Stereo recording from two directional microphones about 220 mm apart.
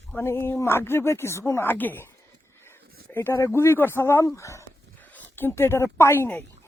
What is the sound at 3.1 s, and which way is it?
Speech, 10° left (ahead or behind).